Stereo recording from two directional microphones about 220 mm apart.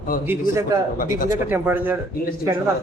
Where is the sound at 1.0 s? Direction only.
35° left (ahead or behind).